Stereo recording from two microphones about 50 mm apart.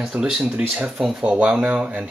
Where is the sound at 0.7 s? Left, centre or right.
Right.